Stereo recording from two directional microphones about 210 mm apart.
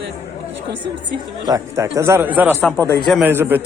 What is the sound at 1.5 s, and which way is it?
Speech, 15° right (ahead or behind).